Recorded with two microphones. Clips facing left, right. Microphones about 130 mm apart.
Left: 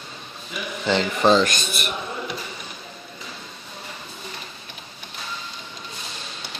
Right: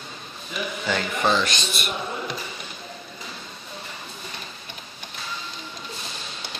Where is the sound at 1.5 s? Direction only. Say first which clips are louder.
Left 1 dB; 50° left (ahead or behind).